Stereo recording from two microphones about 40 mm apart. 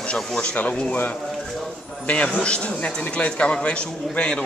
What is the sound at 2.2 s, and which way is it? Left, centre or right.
A man's voice, left.